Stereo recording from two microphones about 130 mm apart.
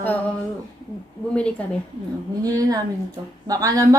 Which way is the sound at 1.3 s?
10° left (ahead or behind).